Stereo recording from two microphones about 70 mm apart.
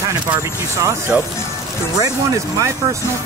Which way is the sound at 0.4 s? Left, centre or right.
Right.